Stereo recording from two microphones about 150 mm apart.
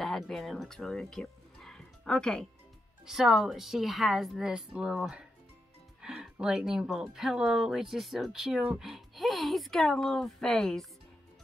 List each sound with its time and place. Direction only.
0.0 s speech: centre (ahead or behind)